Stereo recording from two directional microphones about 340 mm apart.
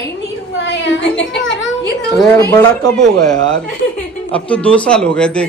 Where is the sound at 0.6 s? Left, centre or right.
Left.